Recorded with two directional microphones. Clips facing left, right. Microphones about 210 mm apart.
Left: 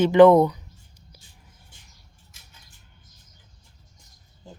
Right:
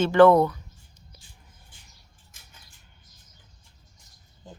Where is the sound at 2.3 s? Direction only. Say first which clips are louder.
Right 2 dB; 50° right (ahead or behind).